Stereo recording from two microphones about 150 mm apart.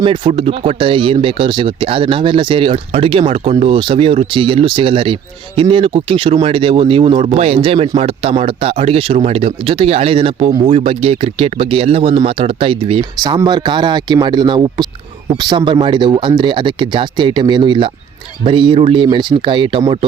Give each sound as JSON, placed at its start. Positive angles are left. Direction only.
{"t": 0.0, "sound": "speech", "side_deg": -35}